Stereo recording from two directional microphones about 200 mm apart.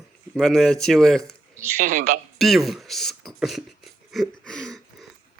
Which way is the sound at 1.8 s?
40° right (ahead or behind).